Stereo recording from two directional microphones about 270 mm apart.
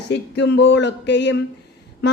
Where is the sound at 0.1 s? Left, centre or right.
Left.